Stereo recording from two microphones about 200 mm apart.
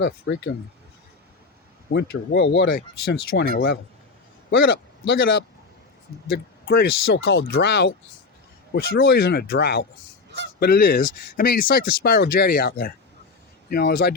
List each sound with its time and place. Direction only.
0.0 s speech: 60° left (ahead or behind)
1.9 s speech: 60° left (ahead or behind)
3.5 s speech: 45° left (ahead or behind)
5.0 s speech: 65° left (ahead or behind)
6.2 s speech: 55° left (ahead or behind)